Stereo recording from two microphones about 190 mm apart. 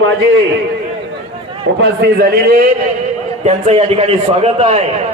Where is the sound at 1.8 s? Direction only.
60° right (ahead or behind).